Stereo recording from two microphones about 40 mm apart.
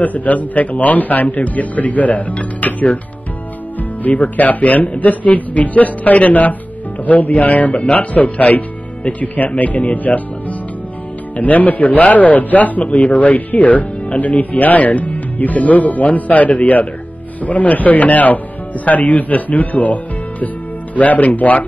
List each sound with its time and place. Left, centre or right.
0.0 s speech: left
4.0 s speech: left
11.3 s speech: left